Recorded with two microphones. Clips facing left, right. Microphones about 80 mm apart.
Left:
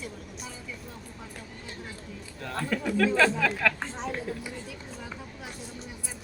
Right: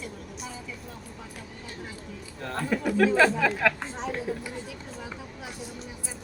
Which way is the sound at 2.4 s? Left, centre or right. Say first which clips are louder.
Right 2 dB; centre.